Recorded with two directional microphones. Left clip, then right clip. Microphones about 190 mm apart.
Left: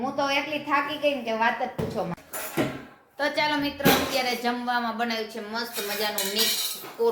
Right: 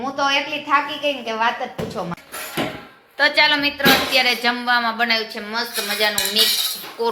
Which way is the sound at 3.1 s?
Centre (ahead or behind).